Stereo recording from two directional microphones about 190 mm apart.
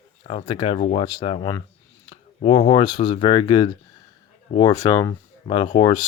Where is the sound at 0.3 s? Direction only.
30° left (ahead or behind).